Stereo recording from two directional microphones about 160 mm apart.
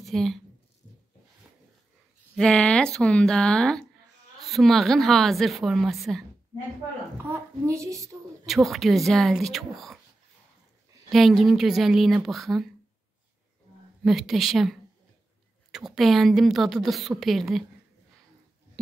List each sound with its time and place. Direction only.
0.0 s a woman's voice: centre (ahead or behind)
2.3 s a woman's voice: 5° left (ahead or behind)
7.2 s a child's voice: 20° right (ahead or behind)
8.5 s a woman's voice: centre (ahead or behind)
11.1 s a woman's voice: centre (ahead or behind)
14.0 s a woman's voice: centre (ahead or behind)